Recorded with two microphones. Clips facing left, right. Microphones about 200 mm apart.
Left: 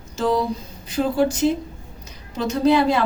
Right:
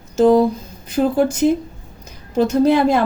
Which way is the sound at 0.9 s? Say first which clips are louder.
Right 3 dB; 50° right (ahead or behind).